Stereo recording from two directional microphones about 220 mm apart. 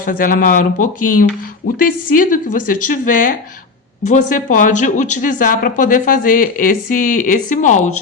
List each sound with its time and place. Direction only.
0.0 s speech: 40° left (ahead or behind)